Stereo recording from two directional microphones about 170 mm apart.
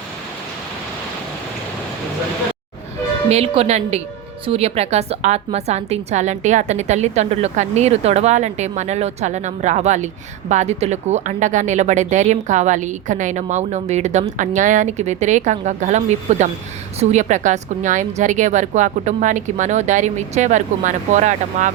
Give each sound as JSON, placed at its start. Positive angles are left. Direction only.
{"t": 3.2, "sound": "a woman's voice", "side_deg": -35}